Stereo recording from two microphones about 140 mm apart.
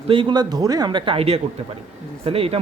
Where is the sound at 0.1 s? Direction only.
35° right (ahead or behind).